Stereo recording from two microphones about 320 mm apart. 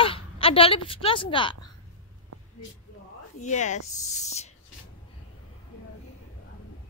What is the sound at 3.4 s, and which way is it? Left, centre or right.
Speech, left.